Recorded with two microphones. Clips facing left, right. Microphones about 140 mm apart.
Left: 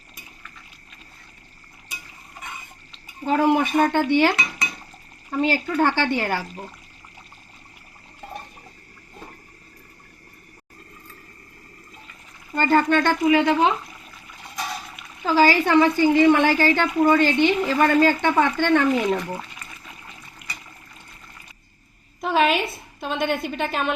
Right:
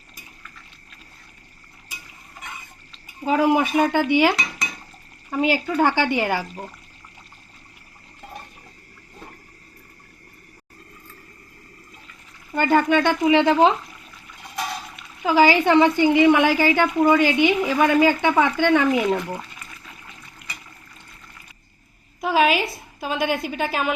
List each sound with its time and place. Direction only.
3.2 s a woman's voice: 10° right (ahead or behind)
12.5 s a woman's voice: 15° right (ahead or behind)
13.3 s speech: 25° right (ahead or behind)
15.2 s a woman's voice: 15° right (ahead or behind)
22.2 s a woman's voice: 5° right (ahead or behind)